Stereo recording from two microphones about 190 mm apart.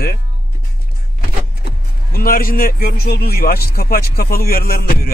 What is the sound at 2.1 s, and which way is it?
A man's voice, 50° left (ahead or behind).